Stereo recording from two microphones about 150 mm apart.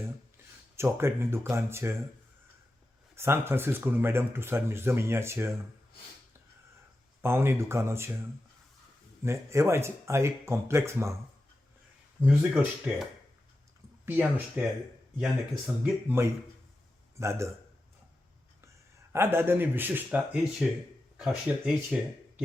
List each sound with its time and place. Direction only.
0.8 s speech: 15° right (ahead or behind)
3.2 s speech: 15° right (ahead or behind)
7.2 s speech: 15° right (ahead or behind)
9.2 s speech: 20° right (ahead or behind)
12.2 s speech: 10° right (ahead or behind)
16.0 s a man's voice: 15° right (ahead or behind)
19.1 s speech: 15° right (ahead or behind)